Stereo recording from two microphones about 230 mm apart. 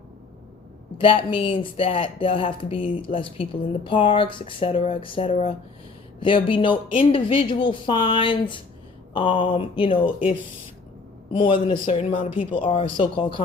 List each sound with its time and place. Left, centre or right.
0.9 s a man's voice: left